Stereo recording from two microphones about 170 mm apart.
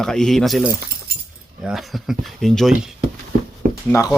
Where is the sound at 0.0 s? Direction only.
5° left (ahead or behind).